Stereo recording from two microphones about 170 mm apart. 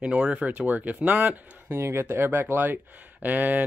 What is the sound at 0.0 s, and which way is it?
Speech, 5° right (ahead or behind).